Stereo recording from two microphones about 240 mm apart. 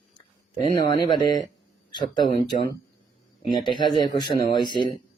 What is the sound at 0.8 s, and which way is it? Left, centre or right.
Speech, centre.